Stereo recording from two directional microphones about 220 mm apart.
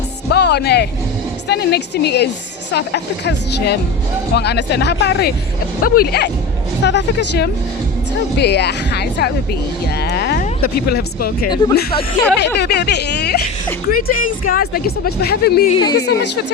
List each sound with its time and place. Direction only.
0.3 s speech: 50° left (ahead or behind)
12.5 s speech: 50° left (ahead or behind)
15.7 s speech: 20° left (ahead or behind)
16.0 s speech: 50° left (ahead or behind)